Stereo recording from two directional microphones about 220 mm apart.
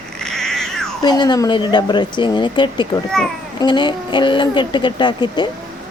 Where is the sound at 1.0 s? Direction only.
20° left (ahead or behind).